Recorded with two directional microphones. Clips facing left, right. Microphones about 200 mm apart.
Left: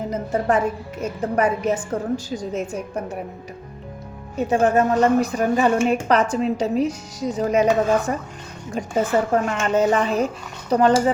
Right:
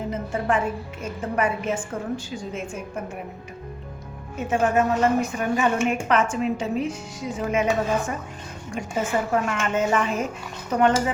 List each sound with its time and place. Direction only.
0.1 s a woman's voice: 40° left (ahead or behind)
4.4 s a woman's voice: 35° left (ahead or behind)